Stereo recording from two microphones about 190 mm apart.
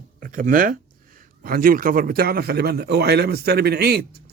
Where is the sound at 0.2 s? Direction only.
45° right (ahead or behind).